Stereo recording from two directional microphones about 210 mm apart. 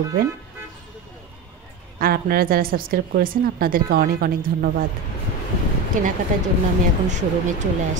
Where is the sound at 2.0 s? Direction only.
45° right (ahead or behind).